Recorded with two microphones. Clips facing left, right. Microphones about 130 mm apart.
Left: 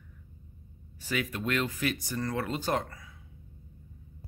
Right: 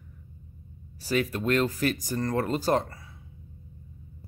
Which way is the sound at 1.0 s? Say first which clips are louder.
Right 6 dB; 35° right (ahead or behind).